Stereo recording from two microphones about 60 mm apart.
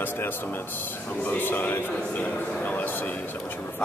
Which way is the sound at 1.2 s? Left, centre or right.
Left.